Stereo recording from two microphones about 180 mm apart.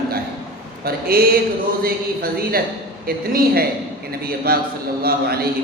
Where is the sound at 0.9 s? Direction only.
55° right (ahead or behind).